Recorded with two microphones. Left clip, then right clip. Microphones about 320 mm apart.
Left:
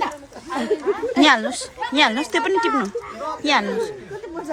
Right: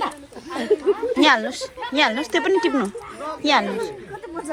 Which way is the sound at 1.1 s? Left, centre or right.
Centre.